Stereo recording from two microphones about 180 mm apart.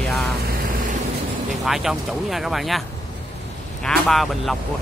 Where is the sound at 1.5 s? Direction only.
Centre (ahead or behind).